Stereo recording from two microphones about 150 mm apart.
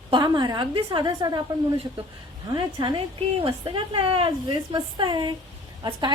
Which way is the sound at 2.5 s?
30° right (ahead or behind).